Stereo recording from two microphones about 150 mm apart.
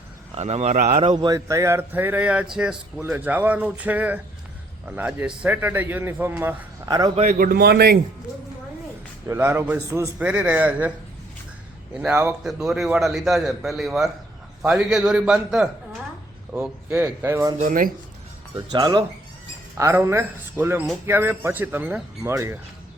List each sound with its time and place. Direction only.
0.3 s speech: 45° right (ahead or behind)
1.0 s speech: 30° right (ahead or behind); by 6.6 s 10° right (ahead or behind)
6.8 s speech: 25° right (ahead or behind)
7.3 s a man's voice: 85° right
9.2 s speech: 15° right (ahead or behind)
11.9 s a man's voice: 10° right (ahead or behind)
17.2 s speech: 20° right (ahead or behind)
17.6 s speech: 65° right (ahead or behind)
18.5 s speech: 25° right (ahead or behind)
19.7 s speech: 15° right (ahead or behind)